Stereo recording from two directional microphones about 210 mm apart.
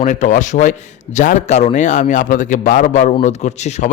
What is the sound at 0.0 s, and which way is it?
A man's voice, 35° left (ahead or behind).